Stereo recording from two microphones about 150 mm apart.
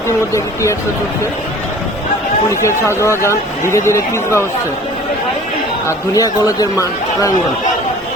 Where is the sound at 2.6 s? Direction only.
20° left (ahead or behind).